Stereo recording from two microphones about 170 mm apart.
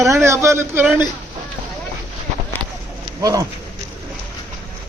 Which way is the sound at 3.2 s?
20° right (ahead or behind).